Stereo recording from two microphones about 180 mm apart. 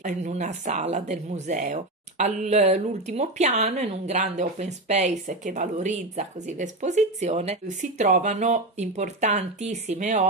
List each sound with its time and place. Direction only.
0.0 s speech: 40° right (ahead or behind)